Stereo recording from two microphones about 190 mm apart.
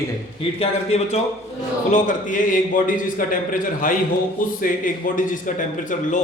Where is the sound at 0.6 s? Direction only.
35° left (ahead or behind).